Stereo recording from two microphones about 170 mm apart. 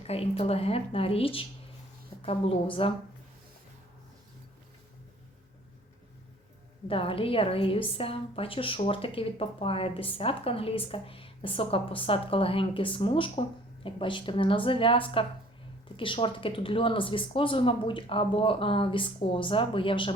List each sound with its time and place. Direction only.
0.1 s a woman's voice: 35° left (ahead or behind)
6.8 s a woman's voice: 30° left (ahead or behind)